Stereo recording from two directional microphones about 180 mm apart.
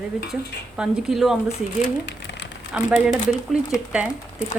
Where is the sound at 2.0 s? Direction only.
80° left.